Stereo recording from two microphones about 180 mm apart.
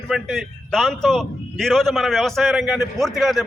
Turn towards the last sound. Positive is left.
turn(degrees=0)  # may be behind; listen again after turning